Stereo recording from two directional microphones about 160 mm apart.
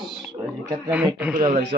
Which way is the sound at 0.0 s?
Centre (ahead or behind).